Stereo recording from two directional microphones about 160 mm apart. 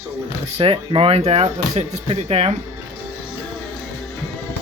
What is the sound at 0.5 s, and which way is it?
Speech, 35° right (ahead or behind).